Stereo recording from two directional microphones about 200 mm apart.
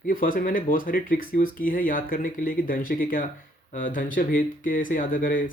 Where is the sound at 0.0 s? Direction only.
40° left (ahead or behind).